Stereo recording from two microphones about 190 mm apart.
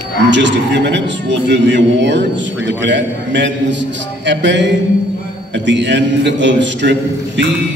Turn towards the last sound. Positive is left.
turn(degrees=-70)  # may be behind; listen again after turning